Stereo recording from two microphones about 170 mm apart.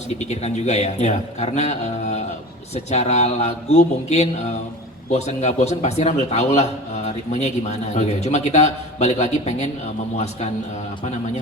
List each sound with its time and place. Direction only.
0.3 s speech: 40° left (ahead or behind)